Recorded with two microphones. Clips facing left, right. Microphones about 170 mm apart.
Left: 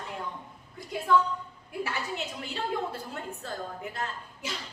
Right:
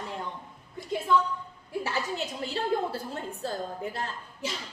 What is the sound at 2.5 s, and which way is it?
A woman's voice, 30° right (ahead or behind).